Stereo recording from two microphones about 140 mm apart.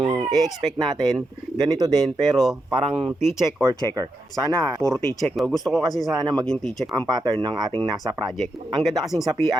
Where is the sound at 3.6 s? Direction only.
25° right (ahead or behind).